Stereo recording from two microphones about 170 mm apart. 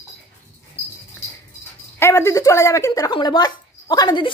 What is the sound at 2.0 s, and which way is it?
Speech, 15° left (ahead or behind).